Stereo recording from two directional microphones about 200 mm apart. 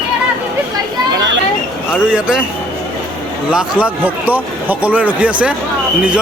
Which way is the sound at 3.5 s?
5° right (ahead or behind).